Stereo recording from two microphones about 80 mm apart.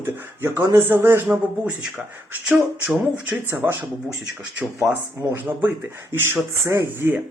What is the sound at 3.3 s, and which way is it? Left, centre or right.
Speech, right.